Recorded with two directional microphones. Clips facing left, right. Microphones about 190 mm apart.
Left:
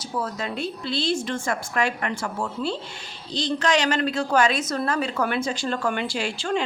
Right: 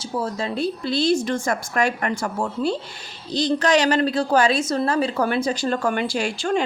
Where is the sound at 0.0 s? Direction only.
30° right (ahead or behind).